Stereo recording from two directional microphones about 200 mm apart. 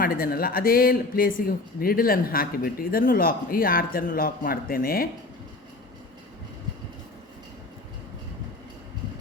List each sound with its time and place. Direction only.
0.0 s speech: 50° left (ahead or behind)